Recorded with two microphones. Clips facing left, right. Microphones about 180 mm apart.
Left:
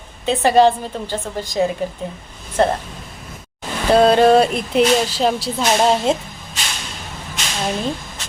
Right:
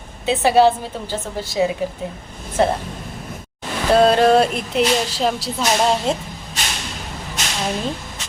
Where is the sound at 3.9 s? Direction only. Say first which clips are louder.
Left 2 dB; centre (ahead or behind).